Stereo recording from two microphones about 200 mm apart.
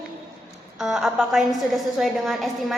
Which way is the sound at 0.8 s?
Centre (ahead or behind).